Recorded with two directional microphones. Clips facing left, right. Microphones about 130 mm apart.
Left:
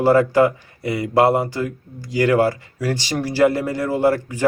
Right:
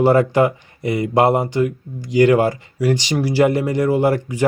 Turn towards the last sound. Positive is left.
turn(degrees=-15)  # may be behind; listen again after turning